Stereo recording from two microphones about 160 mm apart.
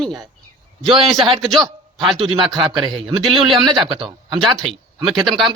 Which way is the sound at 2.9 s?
30° right (ahead or behind).